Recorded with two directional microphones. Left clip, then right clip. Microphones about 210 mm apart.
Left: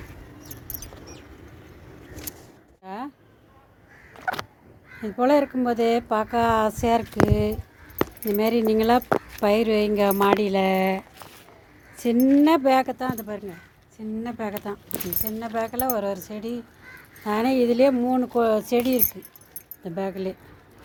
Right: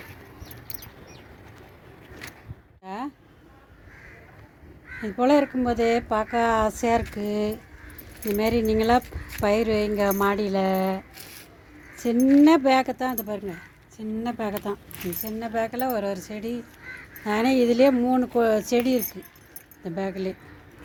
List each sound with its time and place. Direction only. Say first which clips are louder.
2.8 s a sound: right 1 dB; centre (ahead or behind)
5.0 s speech: even; centre (ahead or behind); by 11.0 s 25° left (ahead or behind)
12.1 s speech: right 1 dB; 5° left (ahead or behind)